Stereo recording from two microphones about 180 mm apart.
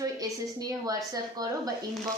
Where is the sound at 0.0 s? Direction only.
20° right (ahead or behind).